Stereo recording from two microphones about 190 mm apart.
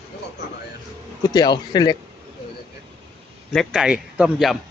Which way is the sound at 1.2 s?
20° left (ahead or behind).